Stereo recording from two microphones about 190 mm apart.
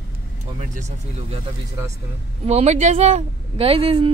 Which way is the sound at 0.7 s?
35° right (ahead or behind).